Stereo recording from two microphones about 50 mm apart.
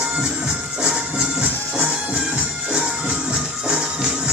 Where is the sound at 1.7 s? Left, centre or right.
Right.